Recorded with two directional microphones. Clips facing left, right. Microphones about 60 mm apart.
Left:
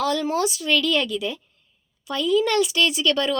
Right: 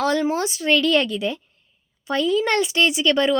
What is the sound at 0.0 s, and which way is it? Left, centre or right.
Speech, right.